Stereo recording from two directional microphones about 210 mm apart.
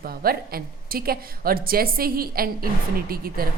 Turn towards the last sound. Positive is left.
turn(degrees=-45)  # may be behind; listen again after turning